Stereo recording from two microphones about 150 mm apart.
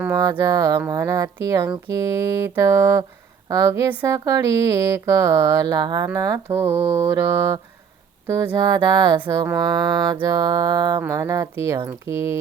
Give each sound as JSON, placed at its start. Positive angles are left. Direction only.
{"t": 0.0, "sound": "speech", "side_deg": -20}
{"t": 6.1, "sound": "mantra", "side_deg": -25}
{"t": 6.9, "sound": "speech", "side_deg": -20}